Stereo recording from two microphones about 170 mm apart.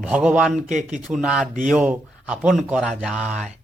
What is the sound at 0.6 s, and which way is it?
Speech, 50° right (ahead or behind).